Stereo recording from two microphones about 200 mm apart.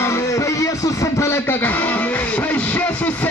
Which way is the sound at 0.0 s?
15° left (ahead or behind).